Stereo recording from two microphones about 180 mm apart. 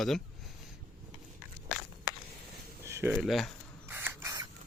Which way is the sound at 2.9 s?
15° right (ahead or behind).